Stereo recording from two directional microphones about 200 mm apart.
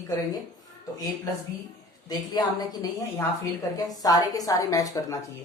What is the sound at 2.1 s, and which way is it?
Speech, 20° left (ahead or behind).